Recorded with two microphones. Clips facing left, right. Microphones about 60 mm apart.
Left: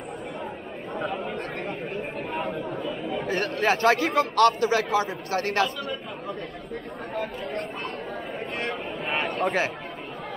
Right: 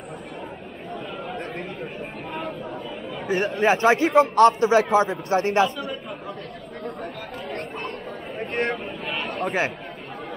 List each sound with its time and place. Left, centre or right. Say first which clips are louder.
3.3 s a man's voice: right 4 dB; centre
9.0 s a sound: left 5 dB; left
9.3 s chatter: even; centre